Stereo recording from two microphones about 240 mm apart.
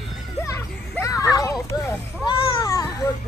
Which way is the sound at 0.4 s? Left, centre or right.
Centre.